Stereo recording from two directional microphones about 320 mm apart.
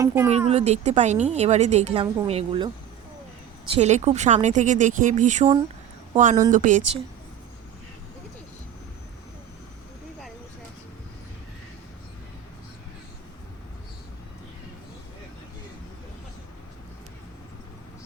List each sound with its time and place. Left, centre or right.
0.0 s speech: centre
0.3 s a woman's voice: centre
3.8 s a woman's voice: right